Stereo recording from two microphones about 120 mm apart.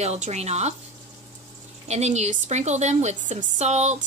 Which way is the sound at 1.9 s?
65° right (ahead or behind).